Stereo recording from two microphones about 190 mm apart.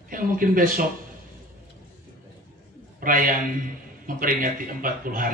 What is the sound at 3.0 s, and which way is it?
Speech, 45° right (ahead or behind).